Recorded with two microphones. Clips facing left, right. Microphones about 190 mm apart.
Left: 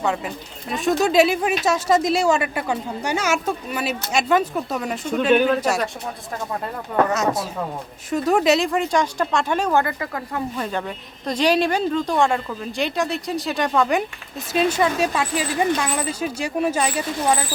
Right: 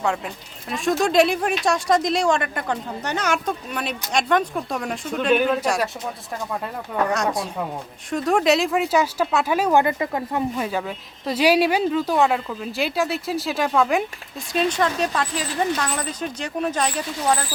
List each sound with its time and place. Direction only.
0.7 s speech: centre (ahead or behind)
7.1 s speech: 5° left (ahead or behind)
9.8 s speech: 20° right (ahead or behind)
10.6 s speech: 5° right (ahead or behind)